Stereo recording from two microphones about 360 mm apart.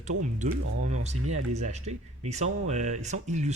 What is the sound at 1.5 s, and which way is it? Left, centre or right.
Speech, centre.